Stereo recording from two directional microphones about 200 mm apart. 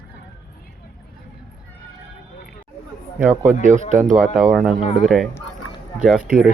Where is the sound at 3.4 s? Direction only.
40° right (ahead or behind).